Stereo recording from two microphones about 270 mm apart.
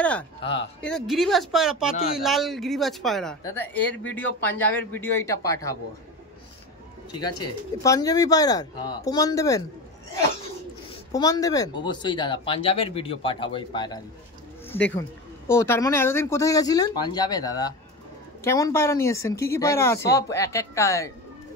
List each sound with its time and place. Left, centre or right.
0.0 s speech: centre
0.4 s speech: centre
0.7 s speech: centre
7.1 s speech: centre
11.1 s speech: centre